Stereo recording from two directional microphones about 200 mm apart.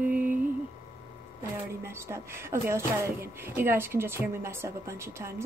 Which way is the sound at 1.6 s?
10° right (ahead or behind).